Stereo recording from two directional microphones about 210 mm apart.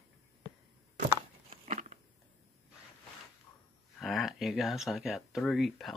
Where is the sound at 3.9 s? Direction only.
Centre (ahead or behind).